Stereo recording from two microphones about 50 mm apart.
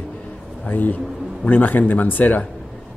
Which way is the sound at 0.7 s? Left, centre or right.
Left.